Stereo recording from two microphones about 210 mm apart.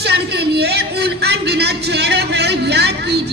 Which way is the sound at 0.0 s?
50° right (ahead or behind).